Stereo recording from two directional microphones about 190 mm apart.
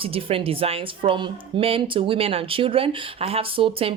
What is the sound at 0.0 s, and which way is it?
A woman's voice, 30° right (ahead or behind).